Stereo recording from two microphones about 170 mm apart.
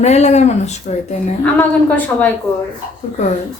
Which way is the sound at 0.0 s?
40° left (ahead or behind).